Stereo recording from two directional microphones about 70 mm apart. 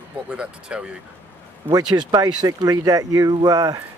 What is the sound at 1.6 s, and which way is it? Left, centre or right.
Speech, right.